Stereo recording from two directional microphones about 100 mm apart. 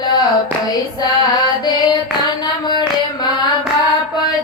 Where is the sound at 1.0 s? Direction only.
45° left (ahead or behind).